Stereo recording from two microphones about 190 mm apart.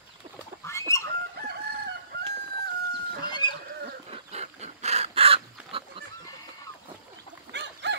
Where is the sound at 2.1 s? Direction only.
55° right (ahead or behind).